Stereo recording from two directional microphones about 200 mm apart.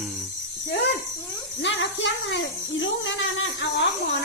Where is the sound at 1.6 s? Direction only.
65° left (ahead or behind).